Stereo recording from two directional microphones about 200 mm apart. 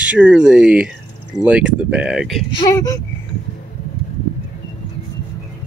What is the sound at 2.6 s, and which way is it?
Speech, 15° left (ahead or behind).